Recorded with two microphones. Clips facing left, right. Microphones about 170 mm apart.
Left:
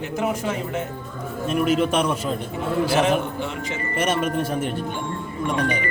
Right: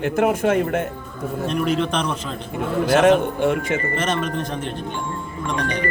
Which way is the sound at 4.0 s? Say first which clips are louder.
Left 1 dB; 10° left (ahead or behind).